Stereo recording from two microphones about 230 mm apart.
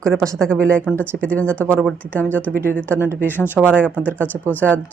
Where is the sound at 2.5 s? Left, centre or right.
Centre.